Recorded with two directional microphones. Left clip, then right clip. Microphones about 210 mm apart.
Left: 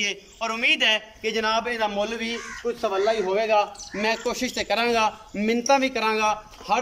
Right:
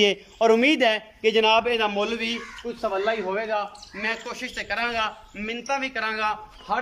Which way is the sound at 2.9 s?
10° left (ahead or behind).